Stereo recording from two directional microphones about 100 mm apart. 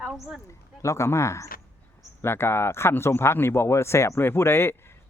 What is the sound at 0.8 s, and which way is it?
Speech, 30° left (ahead or behind).